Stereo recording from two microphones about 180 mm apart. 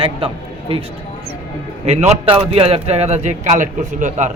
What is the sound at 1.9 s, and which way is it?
A man's voice, 40° right (ahead or behind).